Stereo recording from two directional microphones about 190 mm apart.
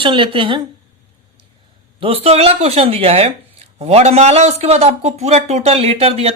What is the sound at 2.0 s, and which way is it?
A man's voice, 30° right (ahead or behind).